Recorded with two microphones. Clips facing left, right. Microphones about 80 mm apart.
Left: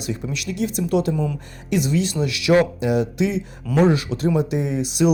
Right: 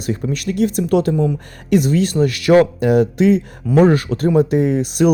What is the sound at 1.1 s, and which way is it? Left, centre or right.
Speech, centre.